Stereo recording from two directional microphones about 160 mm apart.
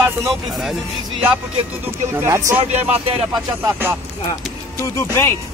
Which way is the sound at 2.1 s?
15° right (ahead or behind).